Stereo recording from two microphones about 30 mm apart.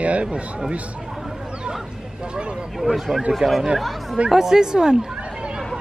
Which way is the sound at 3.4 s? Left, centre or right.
Right.